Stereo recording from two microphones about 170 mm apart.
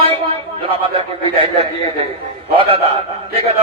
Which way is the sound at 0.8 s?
30° right (ahead or behind).